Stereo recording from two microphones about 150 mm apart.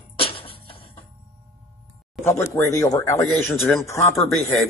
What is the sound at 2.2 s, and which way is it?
Speech, 20° left (ahead or behind).